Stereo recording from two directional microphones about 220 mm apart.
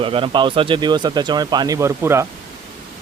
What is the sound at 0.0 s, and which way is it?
Speech, 25° right (ahead or behind).